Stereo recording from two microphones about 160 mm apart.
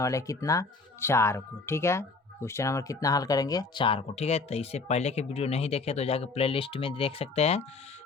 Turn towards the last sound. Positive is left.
turn(degrees=40)  # may be behind; listen again after turning